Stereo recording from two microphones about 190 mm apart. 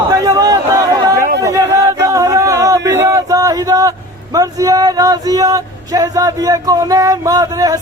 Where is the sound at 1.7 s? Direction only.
15° right (ahead or behind).